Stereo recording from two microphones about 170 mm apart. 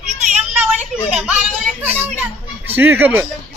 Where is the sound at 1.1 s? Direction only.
5° right (ahead or behind).